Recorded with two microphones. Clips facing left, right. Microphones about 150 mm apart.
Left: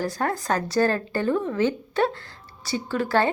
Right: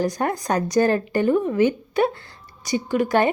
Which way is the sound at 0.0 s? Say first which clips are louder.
Right 3 dB; 15° right (ahead or behind).